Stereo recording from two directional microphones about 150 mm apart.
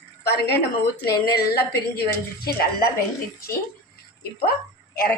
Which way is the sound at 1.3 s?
90° left.